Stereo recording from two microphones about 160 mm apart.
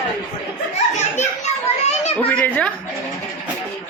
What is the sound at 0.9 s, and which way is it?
Children playing, 45° left (ahead or behind).